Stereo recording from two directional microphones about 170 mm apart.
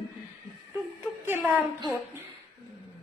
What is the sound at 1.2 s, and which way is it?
Speech, 15° right (ahead or behind).